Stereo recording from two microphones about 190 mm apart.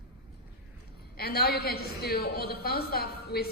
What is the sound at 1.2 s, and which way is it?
A woman's voice, 55° left (ahead or behind).